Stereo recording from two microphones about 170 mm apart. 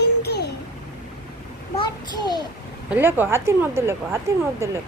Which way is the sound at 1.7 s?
25° left (ahead or behind).